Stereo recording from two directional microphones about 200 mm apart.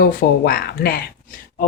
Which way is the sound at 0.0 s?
50° left (ahead or behind).